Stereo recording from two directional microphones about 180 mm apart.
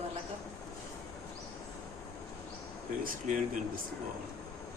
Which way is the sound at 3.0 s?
50° right (ahead or behind).